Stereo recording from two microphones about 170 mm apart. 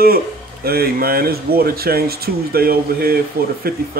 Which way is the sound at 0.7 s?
65° right (ahead or behind).